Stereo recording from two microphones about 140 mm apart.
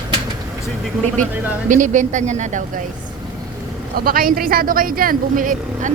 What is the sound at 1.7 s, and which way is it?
Speech, 65° right (ahead or behind).